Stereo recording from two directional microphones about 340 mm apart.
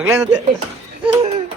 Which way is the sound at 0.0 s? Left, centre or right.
Centre.